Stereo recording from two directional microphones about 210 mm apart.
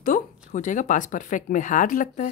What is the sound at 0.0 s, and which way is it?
Speech, 40° left (ahead or behind).